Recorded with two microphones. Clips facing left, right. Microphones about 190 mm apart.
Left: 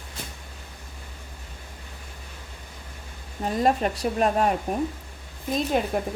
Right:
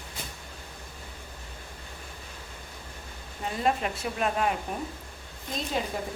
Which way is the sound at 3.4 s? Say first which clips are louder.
Left 5 dB; 40° left (ahead or behind).